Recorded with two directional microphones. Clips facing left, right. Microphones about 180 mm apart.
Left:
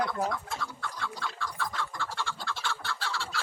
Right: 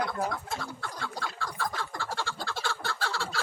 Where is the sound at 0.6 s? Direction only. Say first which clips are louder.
Even; 40° right (ahead or behind).